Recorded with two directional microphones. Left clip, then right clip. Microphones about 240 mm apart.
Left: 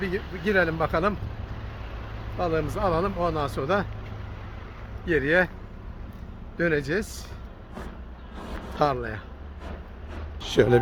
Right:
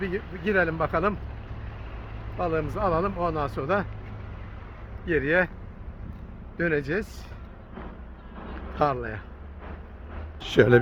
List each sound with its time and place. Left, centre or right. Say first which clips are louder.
0.2 s speech: left 2 dB; left
0.4 s speech: left 1 dB; centre
2.4 s speech: left 1 dB; centre
5.0 s speech: left 1 dB; centre
6.6 s speech: left 1 dB; centre
8.7 s speech: left 1 dB; centre
10.4 s speech: right 1 dB; centre